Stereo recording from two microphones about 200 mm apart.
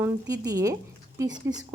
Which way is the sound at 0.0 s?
15° right (ahead or behind).